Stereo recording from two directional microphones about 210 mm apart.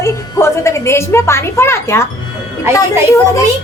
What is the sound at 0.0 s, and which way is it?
A woman's voice, 15° left (ahead or behind).